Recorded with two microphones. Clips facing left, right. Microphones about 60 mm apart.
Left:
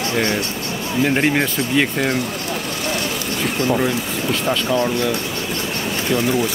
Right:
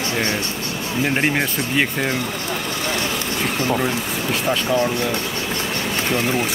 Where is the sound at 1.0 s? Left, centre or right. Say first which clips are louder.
Left 2 dB; centre.